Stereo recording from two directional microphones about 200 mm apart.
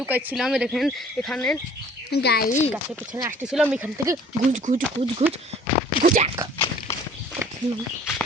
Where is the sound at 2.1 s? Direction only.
55° left (ahead or behind).